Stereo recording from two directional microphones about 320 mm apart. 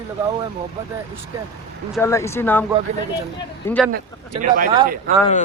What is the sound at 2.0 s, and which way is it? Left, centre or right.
Speech, centre.